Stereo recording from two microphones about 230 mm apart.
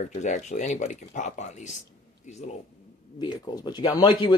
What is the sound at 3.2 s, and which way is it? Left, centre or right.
Speech, centre.